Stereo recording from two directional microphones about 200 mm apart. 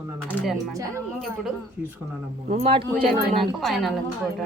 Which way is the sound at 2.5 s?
30° right (ahead or behind).